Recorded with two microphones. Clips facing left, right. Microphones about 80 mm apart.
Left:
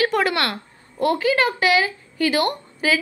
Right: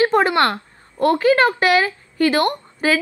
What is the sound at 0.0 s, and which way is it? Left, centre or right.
A woman's voice, right.